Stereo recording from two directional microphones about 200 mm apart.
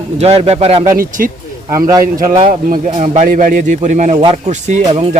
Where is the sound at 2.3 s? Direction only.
35° right (ahead or behind).